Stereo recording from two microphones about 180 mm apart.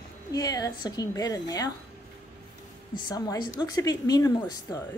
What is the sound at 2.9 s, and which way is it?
A woman's voice, 25° left (ahead or behind).